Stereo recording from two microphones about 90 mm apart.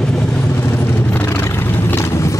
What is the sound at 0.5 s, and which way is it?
Vehicle, 25° left (ahead or behind).